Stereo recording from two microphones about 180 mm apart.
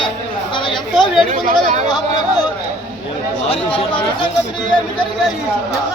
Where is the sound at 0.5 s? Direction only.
25° left (ahead or behind).